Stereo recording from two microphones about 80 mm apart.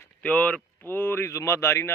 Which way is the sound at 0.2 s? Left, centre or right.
Centre.